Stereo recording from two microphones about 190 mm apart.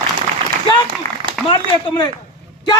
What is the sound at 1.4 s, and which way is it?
Speech, 25° left (ahead or behind).